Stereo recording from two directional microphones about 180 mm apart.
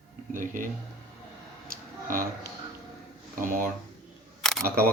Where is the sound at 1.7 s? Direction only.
50° right (ahead or behind).